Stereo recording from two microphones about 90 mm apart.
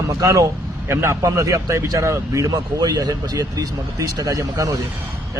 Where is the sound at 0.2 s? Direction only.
35° right (ahead or behind).